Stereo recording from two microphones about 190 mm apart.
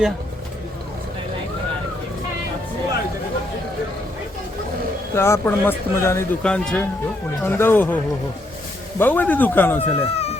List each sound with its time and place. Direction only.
5.1 s speech: 15° left (ahead or behind)
9.0 s speech: 10° left (ahead or behind)
10.0 s speech: 35° left (ahead or behind)